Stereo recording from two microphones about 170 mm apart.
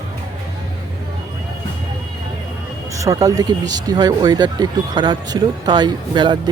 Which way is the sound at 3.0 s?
20° right (ahead or behind).